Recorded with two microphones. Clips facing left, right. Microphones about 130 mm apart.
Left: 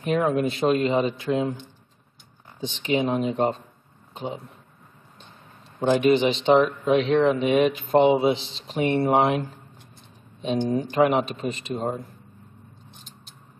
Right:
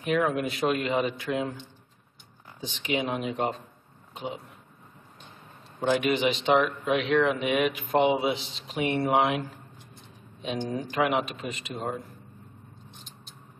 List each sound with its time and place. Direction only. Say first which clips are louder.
0.0 s speech: left 4 dB; 30° left (ahead or behind)
2.6 s speech: left 5 dB; 30° left (ahead or behind)
5.9 s speech: left 5 dB; 30° left (ahead or behind)
10.7 s speech: left 5 dB; 35° left (ahead or behind)